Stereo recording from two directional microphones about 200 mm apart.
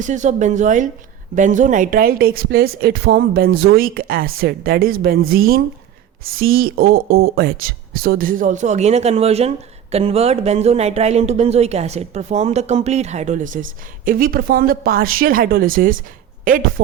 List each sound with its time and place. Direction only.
0.0 s speech: 35° right (ahead or behind)